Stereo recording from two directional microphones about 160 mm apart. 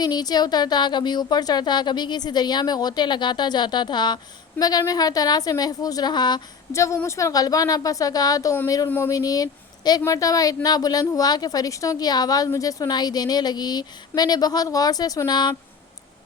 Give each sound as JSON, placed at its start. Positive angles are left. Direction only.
{"t": 0.0, "sound": "a woman's voice", "side_deg": 25}